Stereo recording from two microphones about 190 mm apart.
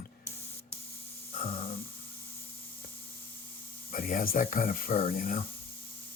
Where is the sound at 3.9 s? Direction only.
50° left (ahead or behind).